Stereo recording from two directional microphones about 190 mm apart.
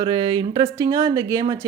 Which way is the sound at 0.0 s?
25° right (ahead or behind).